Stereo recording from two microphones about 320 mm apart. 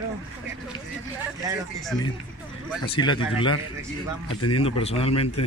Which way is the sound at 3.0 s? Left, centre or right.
Centre.